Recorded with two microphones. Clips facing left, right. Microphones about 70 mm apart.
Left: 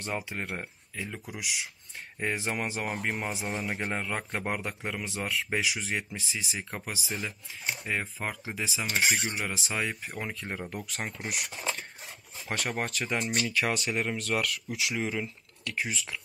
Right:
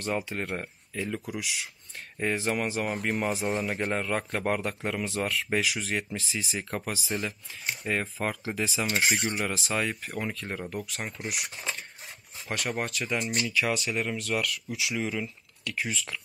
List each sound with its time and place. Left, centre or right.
0.0 s speech: centre
2.7 s speech: centre
10.3 s speech: centre
10.7 s speech: left
12.5 s speech: left
13.1 s speech: left
14.8 s speech: left
15.7 s speech: centre